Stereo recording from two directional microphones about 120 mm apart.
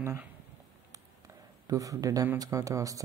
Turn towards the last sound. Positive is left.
turn(degrees=-30)  # may be behind; listen again after turning